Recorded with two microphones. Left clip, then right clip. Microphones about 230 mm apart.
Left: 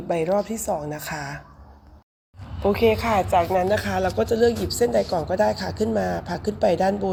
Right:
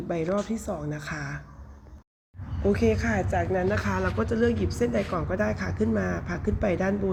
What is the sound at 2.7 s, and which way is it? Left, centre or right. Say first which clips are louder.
A woman's voice: left 7 dB; centre.